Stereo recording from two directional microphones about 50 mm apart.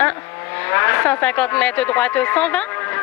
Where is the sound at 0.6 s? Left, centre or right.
Left.